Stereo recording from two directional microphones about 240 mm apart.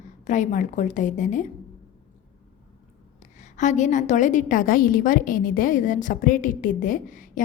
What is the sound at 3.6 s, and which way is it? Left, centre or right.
A woman's voice, left.